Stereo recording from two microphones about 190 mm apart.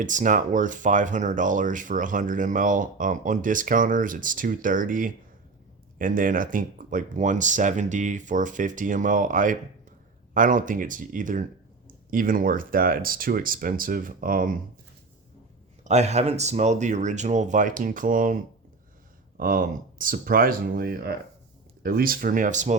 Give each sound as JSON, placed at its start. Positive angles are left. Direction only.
{"t": 0.0, "sound": "speech", "side_deg": -40}
{"t": 15.8, "sound": "speech", "side_deg": -35}
{"t": 19.4, "sound": "speech", "side_deg": -45}